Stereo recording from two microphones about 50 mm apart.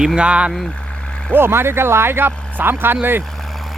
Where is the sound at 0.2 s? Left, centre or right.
Right.